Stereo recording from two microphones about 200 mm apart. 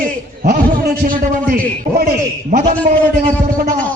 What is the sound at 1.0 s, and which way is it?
A man's voice, 45° right (ahead or behind).